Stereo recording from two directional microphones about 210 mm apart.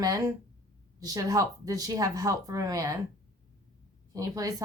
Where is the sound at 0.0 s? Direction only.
15° right (ahead or behind).